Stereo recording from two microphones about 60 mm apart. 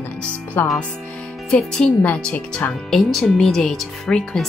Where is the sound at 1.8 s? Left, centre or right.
Centre.